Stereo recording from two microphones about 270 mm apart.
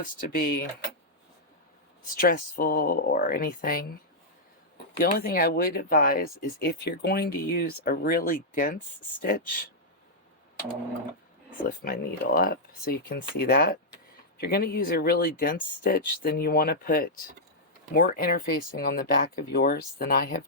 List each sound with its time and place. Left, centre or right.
0.0 s speech: left
2.1 s speech: left
4.9 s speech: left
11.6 s speech: left